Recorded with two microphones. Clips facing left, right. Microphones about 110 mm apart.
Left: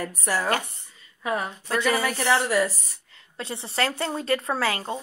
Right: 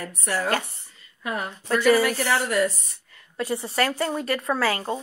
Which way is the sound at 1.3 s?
20° left (ahead or behind).